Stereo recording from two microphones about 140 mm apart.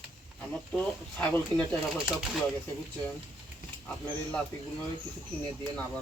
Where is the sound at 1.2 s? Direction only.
10° left (ahead or behind).